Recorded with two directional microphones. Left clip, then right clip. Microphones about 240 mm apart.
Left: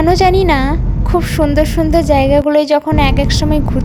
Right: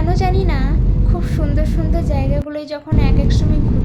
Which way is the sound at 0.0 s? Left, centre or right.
Left.